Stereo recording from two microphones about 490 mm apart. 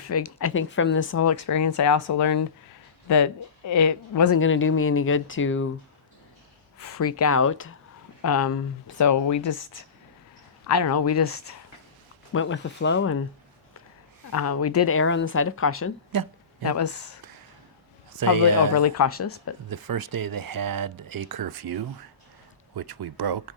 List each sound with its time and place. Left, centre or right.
0.1 s speech: left
3.7 s speech: left
6.8 s speech: left
10.7 s speech: left
12.3 s speech: left
14.3 s speech: left
16.1 s speech: right
16.6 s speech: left
18.2 s speech: right
18.8 s speech: left
19.7 s speech: right